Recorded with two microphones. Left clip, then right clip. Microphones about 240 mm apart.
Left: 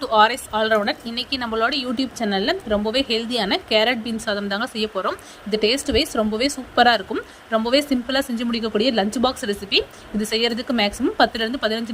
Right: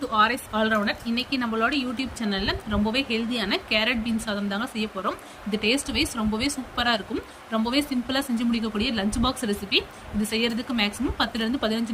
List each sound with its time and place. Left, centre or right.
0.0 s a woman's voice: left